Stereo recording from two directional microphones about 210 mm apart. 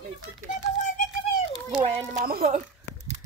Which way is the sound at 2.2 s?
45° right (ahead or behind).